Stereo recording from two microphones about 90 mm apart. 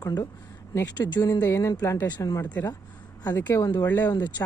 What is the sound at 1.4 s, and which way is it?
Speech, 35° left (ahead or behind).